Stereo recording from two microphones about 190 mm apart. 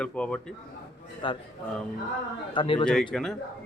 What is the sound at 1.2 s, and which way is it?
Speech, 25° left (ahead or behind).